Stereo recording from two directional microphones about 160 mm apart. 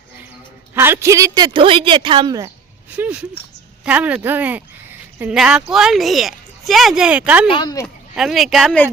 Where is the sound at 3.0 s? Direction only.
15° right (ahead or behind).